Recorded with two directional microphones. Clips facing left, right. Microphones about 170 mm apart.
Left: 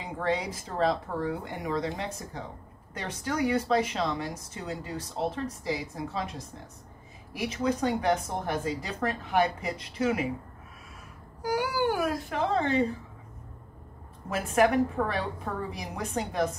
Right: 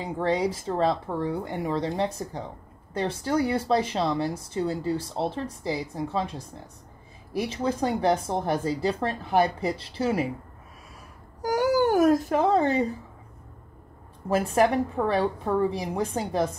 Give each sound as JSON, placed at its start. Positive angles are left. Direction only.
{"t": 0.0, "sound": "speech", "side_deg": -30}
{"t": 11.4, "sound": "speech", "side_deg": -45}
{"t": 14.3, "sound": "a woman's voice", "side_deg": -30}